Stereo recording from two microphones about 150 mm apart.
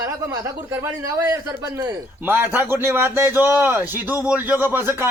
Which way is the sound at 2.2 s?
15° right (ahead or behind).